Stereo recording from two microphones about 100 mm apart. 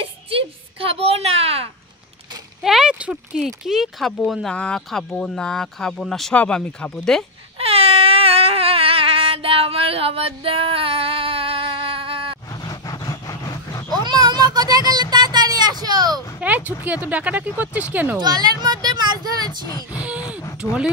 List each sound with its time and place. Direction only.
0.0 s a child's voice: 65° right (ahead or behind)
2.6 s speech: 5° right (ahead or behind)
6.3 s speech: 15° left (ahead or behind)
7.5 s a sound: 75° right (ahead or behind)
12.6 s vehicle: 40° left (ahead or behind)
13.9 s vehicle: 45° right (ahead or behind)
16.3 s speech: 15° right (ahead or behind)
18.2 s a sound: 45° right (ahead or behind)
19.9 s a sound: 15° right (ahead or behind)